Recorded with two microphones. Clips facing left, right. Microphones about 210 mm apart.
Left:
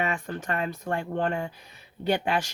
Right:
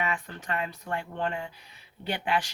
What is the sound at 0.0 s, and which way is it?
Speech, 45° left (ahead or behind).